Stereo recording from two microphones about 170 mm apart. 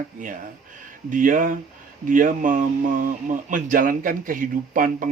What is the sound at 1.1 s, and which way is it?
Speech, 50° right (ahead or behind).